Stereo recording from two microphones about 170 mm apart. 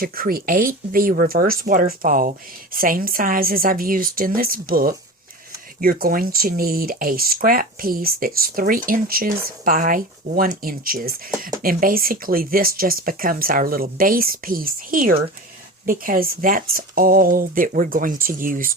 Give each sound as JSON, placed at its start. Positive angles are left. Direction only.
{"t": 0.0, "sound": "speech", "side_deg": -60}